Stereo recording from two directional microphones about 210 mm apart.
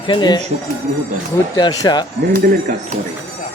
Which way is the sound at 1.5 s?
20° left (ahead or behind).